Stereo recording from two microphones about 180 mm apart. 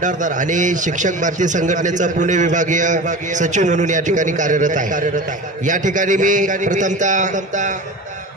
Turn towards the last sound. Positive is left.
turn(degrees=-45)  # may be behind; listen again after turning